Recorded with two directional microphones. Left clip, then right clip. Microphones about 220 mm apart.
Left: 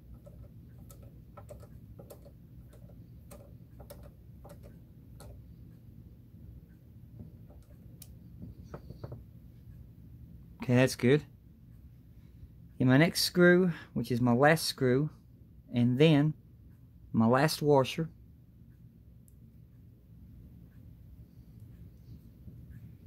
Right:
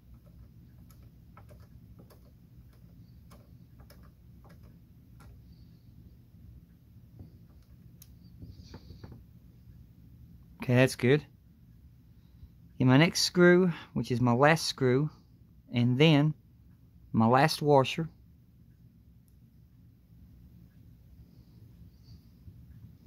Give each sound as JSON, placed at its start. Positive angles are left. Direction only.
{"t": 10.6, "sound": "speech", "side_deg": -20}
{"t": 12.7, "sound": "speech", "side_deg": -20}